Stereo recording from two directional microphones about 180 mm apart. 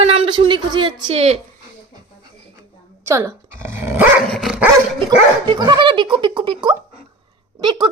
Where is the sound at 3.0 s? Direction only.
15° right (ahead or behind).